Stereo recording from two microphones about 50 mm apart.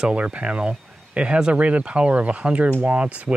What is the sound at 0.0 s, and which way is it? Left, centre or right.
Speech, right.